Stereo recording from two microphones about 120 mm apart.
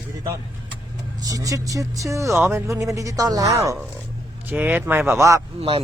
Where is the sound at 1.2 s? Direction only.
30° right (ahead or behind).